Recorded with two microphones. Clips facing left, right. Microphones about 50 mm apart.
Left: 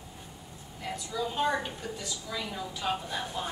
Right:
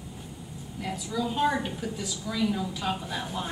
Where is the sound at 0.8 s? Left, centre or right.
Centre.